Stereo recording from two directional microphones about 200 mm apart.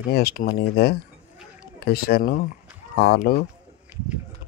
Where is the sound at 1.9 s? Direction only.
50° left (ahead or behind).